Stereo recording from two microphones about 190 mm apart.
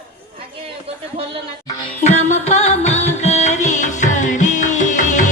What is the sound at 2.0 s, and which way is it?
Music, 35° left (ahead or behind).